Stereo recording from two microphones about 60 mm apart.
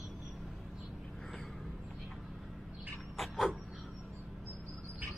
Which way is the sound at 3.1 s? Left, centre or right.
Centre.